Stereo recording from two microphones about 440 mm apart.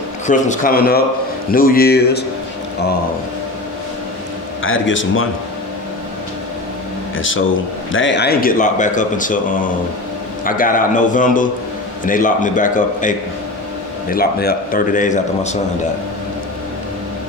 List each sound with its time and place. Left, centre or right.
0.3 s a man's voice: centre
4.6 s a man's voice: left
7.9 s a man's voice: left